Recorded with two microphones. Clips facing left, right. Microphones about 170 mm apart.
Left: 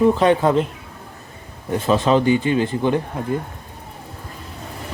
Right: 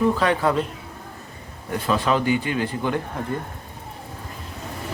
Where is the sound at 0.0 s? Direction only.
20° left (ahead or behind).